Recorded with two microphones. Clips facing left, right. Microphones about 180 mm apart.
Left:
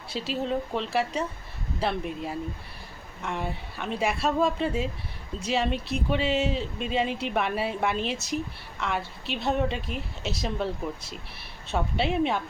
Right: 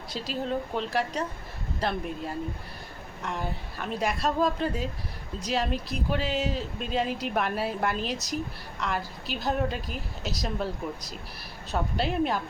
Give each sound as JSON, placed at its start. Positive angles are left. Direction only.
{"t": 0.1, "sound": "speech", "side_deg": 0}
{"t": 11.7, "sound": "speech", "side_deg": 0}